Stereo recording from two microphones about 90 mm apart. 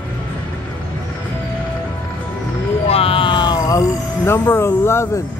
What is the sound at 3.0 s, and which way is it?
Music, 85° left.